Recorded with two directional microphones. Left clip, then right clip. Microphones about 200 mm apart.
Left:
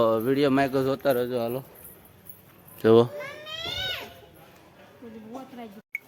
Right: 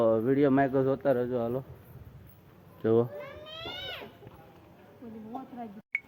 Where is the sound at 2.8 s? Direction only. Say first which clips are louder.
Left 8 dB; 65° left (ahead or behind).